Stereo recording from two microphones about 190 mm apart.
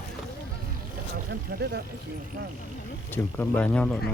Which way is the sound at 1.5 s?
60° right (ahead or behind).